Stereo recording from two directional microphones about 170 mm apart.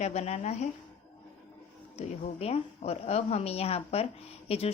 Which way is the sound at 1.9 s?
40° left (ahead or behind).